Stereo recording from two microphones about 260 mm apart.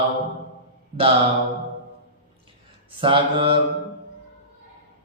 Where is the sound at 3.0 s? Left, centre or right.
Centre.